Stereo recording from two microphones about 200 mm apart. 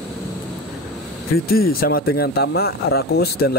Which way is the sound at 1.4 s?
50° left (ahead or behind).